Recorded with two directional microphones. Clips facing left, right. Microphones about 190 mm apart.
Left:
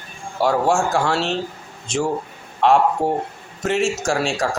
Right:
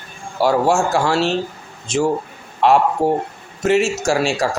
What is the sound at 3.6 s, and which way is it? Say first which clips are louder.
Speech: right 4 dB; 5° right (ahead or behind).